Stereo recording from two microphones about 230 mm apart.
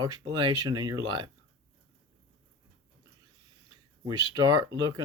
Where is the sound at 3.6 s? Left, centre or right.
Centre.